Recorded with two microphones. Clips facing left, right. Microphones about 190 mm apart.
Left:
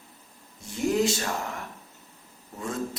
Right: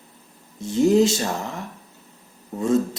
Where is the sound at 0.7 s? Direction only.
25° right (ahead or behind).